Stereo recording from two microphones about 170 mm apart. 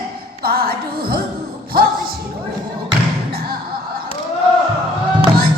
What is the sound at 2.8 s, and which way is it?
Thump, 65° right (ahead or behind).